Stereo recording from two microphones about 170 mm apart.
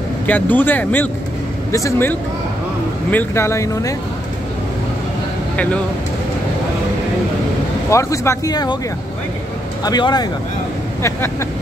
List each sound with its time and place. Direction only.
0.3 s speech: 10° left (ahead or behind)
7.9 s speech: 15° left (ahead or behind)
9.8 s speech: 25° left (ahead or behind)